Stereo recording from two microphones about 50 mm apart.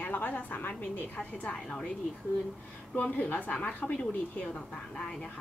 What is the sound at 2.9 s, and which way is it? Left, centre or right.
A woman's voice, left.